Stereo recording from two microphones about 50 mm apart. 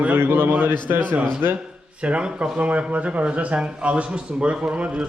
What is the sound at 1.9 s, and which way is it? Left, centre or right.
Speech, right.